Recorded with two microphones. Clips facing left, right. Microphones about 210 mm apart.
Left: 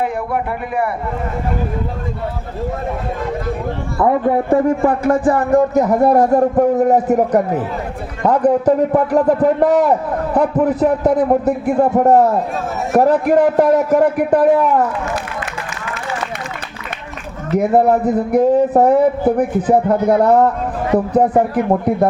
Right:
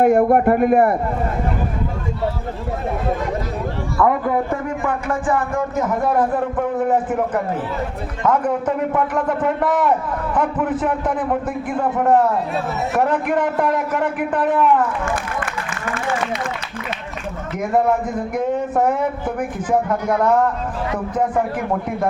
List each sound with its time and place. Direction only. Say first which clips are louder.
0.0 s speech: right 7 dB; 50° right (ahead or behind)
3.9 s a man's voice: left 3 dB; 25° left (ahead or behind)
15.0 s a sound: left 1 dB; 55° right (ahead or behind)
17.5 s a man's voice: left 6 dB; 35° left (ahead or behind)